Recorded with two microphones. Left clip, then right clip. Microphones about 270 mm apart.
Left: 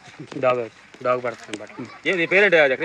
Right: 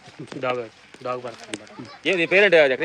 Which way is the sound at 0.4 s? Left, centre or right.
Left.